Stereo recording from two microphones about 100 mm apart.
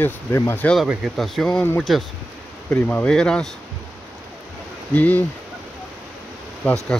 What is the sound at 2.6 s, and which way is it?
Speech, 20° left (ahead or behind).